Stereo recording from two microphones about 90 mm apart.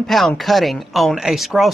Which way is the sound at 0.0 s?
Centre (ahead or behind).